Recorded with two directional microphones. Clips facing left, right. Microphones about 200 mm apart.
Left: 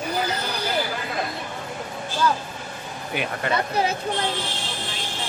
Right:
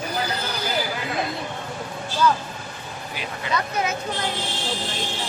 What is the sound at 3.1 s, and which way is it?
Speech, 60° left (ahead or behind).